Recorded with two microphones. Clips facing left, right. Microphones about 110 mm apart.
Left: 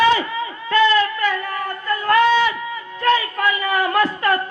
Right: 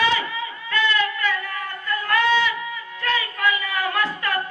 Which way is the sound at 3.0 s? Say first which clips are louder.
Left 7 dB; 40° left (ahead or behind).